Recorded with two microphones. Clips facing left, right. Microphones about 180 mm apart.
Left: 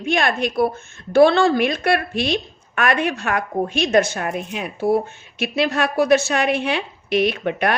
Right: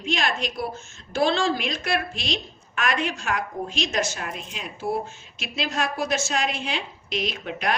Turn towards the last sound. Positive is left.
turn(degrees=60)  # may be behind; listen again after turning